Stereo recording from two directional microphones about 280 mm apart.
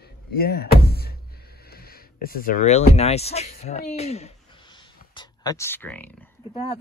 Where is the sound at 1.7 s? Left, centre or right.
Left.